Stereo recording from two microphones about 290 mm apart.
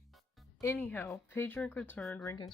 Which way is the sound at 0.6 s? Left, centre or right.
Centre.